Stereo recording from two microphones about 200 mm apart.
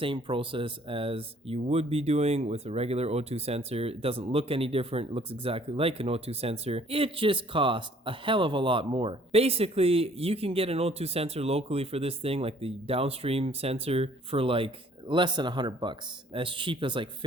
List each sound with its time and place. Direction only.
0.0 s speech: 25° right (ahead or behind)